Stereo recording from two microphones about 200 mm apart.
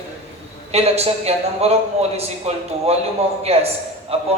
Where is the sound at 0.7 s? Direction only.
30° right (ahead or behind).